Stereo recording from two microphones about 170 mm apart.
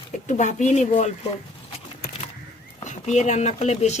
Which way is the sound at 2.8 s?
45° left (ahead or behind).